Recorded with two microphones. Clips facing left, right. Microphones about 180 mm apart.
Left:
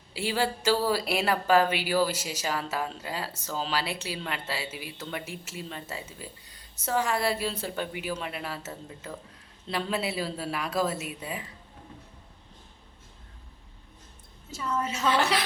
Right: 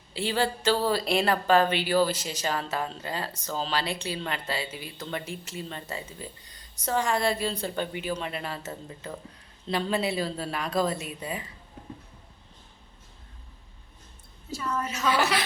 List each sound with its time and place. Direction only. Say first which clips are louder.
0.1 s speech: right 1 dB; 10° left (ahead or behind)
14.5 s a woman's voice: even; 25° left (ahead or behind)
15.0 s a woman's voice: even; 10° right (ahead or behind)